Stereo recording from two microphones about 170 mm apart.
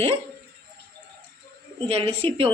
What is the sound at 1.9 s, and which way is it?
Speech, 35° right (ahead or behind).